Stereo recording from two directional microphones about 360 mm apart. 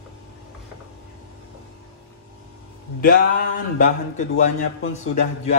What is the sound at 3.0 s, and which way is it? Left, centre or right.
Speech, left.